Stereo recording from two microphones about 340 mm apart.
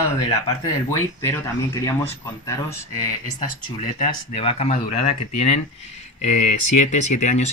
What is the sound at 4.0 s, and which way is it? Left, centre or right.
Speech, centre.